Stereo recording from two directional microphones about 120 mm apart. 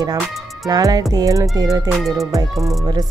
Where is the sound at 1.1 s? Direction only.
30° right (ahead or behind).